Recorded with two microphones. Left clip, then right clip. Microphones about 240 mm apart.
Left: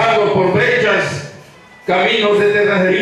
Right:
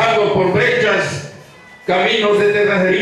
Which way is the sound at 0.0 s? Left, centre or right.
Centre.